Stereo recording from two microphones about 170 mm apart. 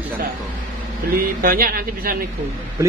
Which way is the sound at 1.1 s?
60° right (ahead or behind).